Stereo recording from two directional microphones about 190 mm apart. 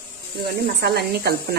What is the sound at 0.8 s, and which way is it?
Speech, 60° right (ahead or behind).